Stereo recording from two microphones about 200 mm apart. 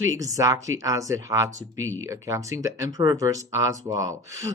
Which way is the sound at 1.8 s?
80° right.